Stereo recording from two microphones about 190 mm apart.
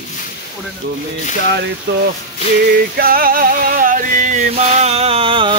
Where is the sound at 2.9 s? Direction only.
50° right (ahead or behind); by 5.5 s 25° right (ahead or behind).